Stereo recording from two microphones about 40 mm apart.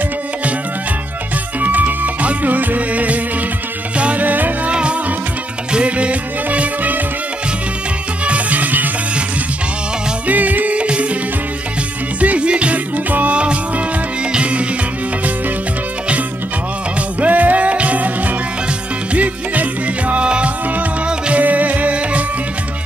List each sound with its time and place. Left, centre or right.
1.6 s music: right
4.6 s music: right
8.3 s music: right
10.2 s music: right
10.8 s music: right
12.2 s music: right
13.4 s music: right
17.2 s music: right
20.2 s music: right
21.4 s music: right